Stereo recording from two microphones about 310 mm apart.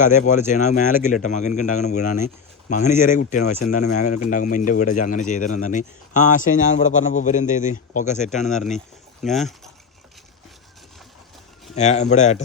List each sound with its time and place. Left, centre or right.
0.0 s speech: left
9.2 s speech: centre
11.7 s speech: left